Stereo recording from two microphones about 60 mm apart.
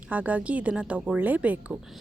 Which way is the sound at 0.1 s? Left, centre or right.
Right.